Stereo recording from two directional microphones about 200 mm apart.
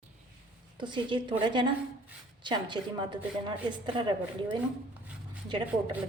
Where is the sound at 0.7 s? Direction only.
25° right (ahead or behind).